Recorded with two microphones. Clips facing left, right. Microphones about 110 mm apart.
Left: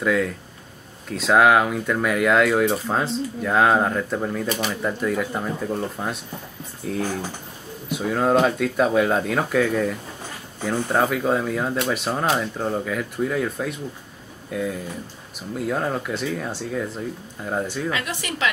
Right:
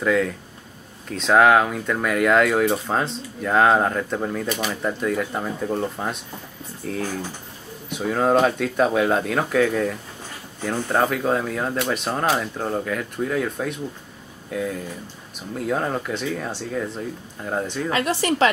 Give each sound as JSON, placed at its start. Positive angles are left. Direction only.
{"t": 0.0, "sound": "speech", "side_deg": 0}
{"t": 17.9, "sound": "a woman's voice", "side_deg": -35}